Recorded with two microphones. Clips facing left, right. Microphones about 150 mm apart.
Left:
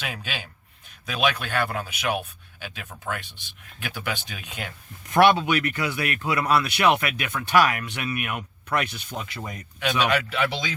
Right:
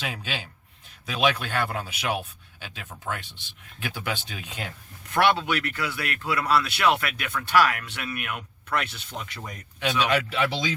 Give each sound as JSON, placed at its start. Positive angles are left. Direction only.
{"t": 0.0, "sound": "speech", "side_deg": -30}
{"t": 5.1, "sound": "speech", "side_deg": 15}
{"t": 10.1, "sound": "speech", "side_deg": -30}